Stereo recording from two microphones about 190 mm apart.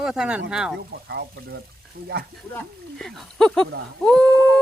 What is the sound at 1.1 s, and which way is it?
Speech, 60° right (ahead or behind).